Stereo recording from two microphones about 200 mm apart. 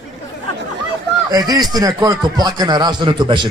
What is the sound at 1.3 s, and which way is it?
Speech, 20° right (ahead or behind).